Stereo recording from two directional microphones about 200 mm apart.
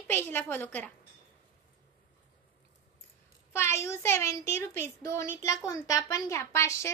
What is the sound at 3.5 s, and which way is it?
A child's voice, 15° left (ahead or behind).